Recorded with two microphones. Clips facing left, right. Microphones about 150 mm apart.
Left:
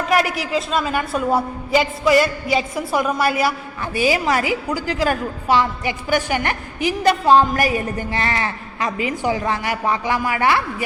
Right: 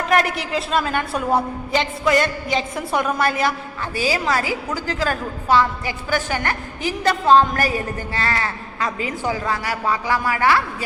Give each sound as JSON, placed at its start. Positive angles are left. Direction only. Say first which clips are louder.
{"t": 0.1, "sound": "a woman's voice", "louder": "left 1 dB", "side_deg": 0}
{"t": 3.9, "sound": "a woman's voice", "louder": "left 3 dB", "side_deg": 20}